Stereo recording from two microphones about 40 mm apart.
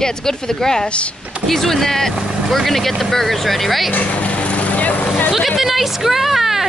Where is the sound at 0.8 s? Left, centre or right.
Left.